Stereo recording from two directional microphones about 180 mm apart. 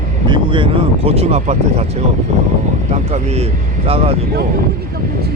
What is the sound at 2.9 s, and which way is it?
Speech, 35° right (ahead or behind).